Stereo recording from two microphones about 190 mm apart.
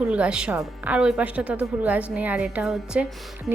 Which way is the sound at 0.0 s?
5° right (ahead or behind).